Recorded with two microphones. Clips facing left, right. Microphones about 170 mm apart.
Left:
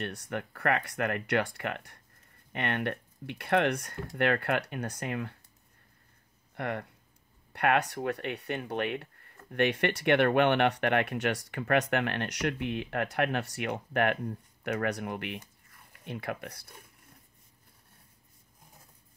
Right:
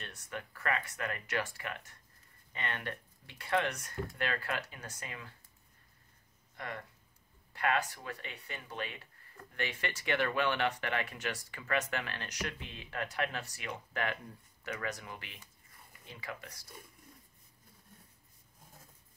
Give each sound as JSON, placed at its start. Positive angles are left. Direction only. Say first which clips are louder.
{"t": 0.0, "sound": "speech", "louder": "left 9 dB", "side_deg": 60}
{"t": 6.5, "sound": "speech", "louder": "left 9 dB", "side_deg": 65}